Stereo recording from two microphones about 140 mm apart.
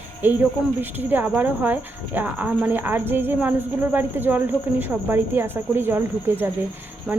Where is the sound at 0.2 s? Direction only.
15° right (ahead or behind).